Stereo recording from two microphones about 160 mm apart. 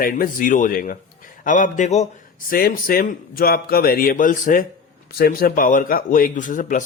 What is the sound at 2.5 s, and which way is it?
A man's voice, 65° left (ahead or behind).